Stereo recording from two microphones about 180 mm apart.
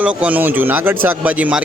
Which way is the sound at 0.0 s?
10° right (ahead or behind).